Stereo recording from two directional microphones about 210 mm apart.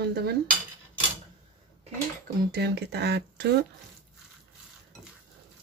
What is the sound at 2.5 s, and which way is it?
Speech, 50° right (ahead or behind).